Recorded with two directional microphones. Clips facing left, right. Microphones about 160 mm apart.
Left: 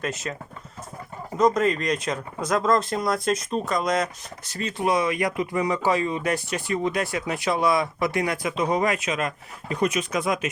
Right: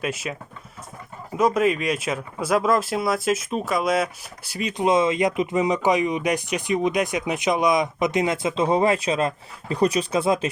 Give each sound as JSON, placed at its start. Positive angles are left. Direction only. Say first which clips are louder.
{"t": 0.0, "sound": "speech", "louder": "right 2 dB", "side_deg": -10}
{"t": 1.4, "sound": "speech", "louder": "right 1 dB", "side_deg": -10}